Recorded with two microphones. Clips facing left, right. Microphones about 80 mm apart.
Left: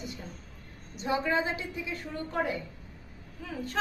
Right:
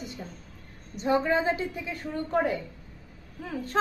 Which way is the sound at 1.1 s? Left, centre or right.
Right.